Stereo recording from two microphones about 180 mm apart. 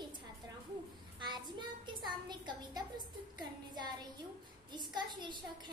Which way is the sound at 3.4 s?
25° right (ahead or behind).